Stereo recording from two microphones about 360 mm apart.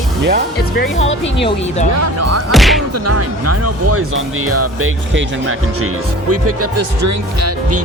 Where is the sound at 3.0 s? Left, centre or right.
Right.